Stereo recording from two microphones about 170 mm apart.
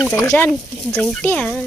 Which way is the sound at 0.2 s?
10° left (ahead or behind).